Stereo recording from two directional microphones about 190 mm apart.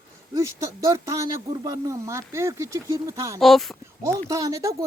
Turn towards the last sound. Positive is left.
turn(degrees=-15)  # may be behind; listen again after turning